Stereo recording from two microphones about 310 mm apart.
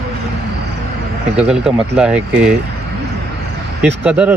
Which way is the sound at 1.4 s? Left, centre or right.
Centre.